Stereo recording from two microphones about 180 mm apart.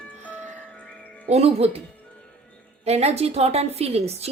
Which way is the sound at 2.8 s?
35° right (ahead or behind).